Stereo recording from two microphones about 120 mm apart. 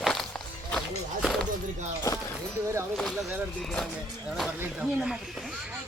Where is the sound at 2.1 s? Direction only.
30° left (ahead or behind).